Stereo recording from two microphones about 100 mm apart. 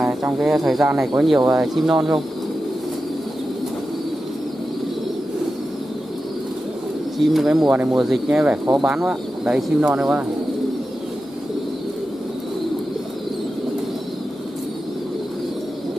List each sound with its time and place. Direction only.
0.2 s speech: 5° right (ahead or behind)
7.2 s speech: centre (ahead or behind)
7.7 s speech: 15° right (ahead or behind)
8.0 s speech: 5° right (ahead or behind)